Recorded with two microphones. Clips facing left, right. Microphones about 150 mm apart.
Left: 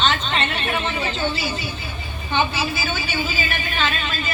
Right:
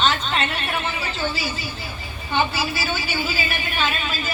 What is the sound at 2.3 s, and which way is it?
Speech, 5° right (ahead or behind).